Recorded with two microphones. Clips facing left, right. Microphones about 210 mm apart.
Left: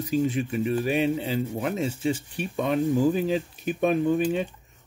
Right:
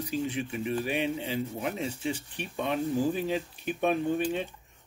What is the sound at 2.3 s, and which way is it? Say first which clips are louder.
Speech: left 6 dB; 40° left (ahead or behind).